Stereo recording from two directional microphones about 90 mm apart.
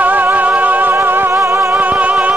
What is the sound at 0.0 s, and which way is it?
Music, 20° right (ahead or behind).